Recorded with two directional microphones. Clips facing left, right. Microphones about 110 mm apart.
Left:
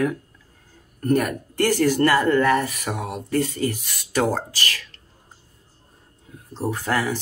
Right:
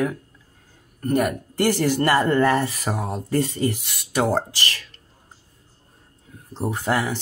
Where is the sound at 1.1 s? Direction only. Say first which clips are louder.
Left 1 dB; 15° right (ahead or behind).